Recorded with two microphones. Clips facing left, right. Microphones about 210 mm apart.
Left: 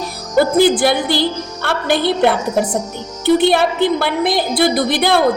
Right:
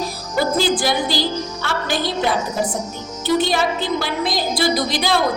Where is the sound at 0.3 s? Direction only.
55° left (ahead or behind).